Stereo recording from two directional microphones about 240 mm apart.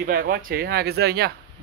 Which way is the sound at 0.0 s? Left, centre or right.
Right.